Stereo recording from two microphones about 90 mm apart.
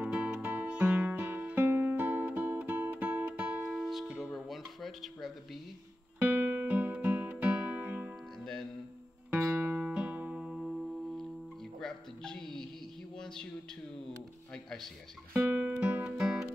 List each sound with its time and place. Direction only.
0.0 s music: 15° right (ahead or behind)
3.6 s music: 5° right (ahead or behind)
6.1 s music: 20° right (ahead or behind)
9.3 s music: 15° right (ahead or behind); by 12.6 s 5° left (ahead or behind)
13.2 s a sound: 5° left (ahead or behind)
15.3 s music: 20° right (ahead or behind)